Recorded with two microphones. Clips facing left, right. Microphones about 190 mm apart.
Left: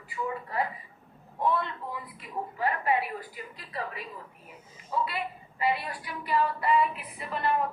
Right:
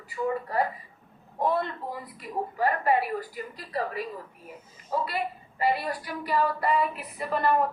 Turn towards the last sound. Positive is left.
turn(degrees=-40)  # may be behind; listen again after turning